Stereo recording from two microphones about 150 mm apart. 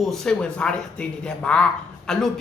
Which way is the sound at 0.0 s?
5° left (ahead or behind).